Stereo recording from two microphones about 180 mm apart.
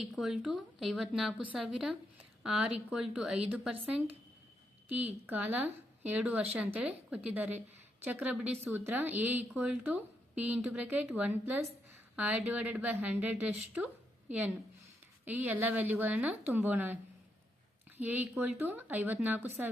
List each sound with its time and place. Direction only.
0.0 s a woman's voice: centre (ahead or behind)
13.7 s a sound: 10° right (ahead or behind)
15.2 s a woman's voice: 10° right (ahead or behind)
18.0 s a woman's voice: 10° right (ahead or behind)